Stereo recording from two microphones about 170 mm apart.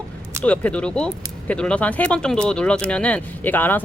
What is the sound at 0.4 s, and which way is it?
Speech, 10° left (ahead or behind).